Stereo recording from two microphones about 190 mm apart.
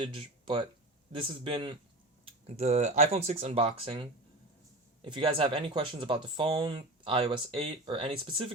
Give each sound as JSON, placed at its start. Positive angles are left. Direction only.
{"t": 0.0, "sound": "speech", "side_deg": -25}